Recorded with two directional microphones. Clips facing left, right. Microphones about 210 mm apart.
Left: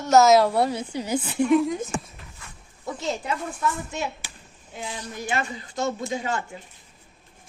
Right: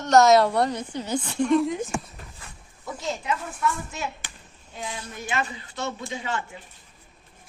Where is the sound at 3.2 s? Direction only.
25° left (ahead or behind).